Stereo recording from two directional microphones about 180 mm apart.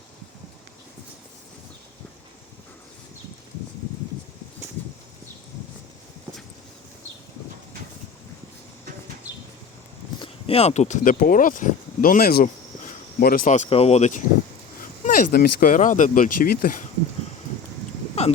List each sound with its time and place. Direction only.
10.2 s speech: 30° left (ahead or behind)
14.8 s speech: 50° left (ahead or behind)